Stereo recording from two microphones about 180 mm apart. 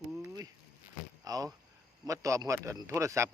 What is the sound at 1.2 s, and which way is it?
Speech, 20° right (ahead or behind).